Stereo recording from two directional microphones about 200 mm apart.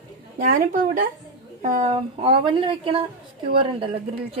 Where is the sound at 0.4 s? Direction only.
40° right (ahead or behind).